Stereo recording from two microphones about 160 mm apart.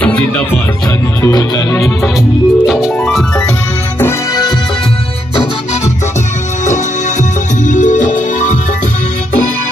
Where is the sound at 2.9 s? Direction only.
10° left (ahead or behind).